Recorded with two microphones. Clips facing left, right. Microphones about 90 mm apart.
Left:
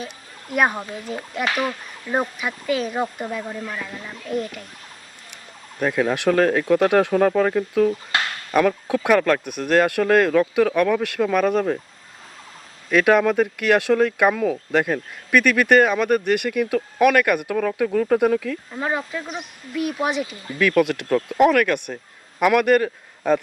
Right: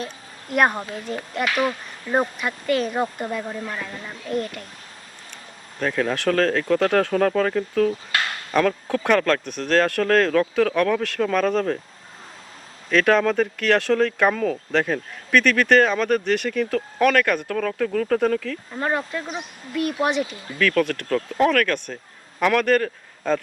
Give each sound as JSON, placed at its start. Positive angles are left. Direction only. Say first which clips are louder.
{"t": 0.5, "sound": "speech", "louder": "right 1 dB", "side_deg": 0}
{"t": 5.8, "sound": "speech", "louder": "left 2 dB", "side_deg": 10}
{"t": 8.1, "sound": "a sound", "louder": "left 1 dB", "side_deg": 25}
{"t": 8.5, "sound": "speech", "louder": "left 2 dB", "side_deg": 10}
{"t": 12.9, "sound": "speech", "louder": "left 2 dB", "side_deg": 10}
{"t": 20.6, "sound": "a man's voice", "louder": "left 2 dB", "side_deg": 15}